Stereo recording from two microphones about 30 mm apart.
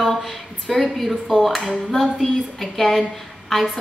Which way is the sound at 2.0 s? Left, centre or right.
Centre.